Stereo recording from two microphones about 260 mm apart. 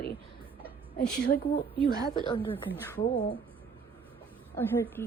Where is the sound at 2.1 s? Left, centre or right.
Centre.